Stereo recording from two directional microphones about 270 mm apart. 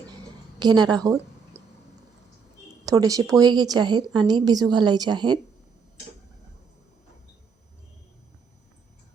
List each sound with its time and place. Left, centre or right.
0.6 s a woman's voice: centre
2.8 s a woman's voice: centre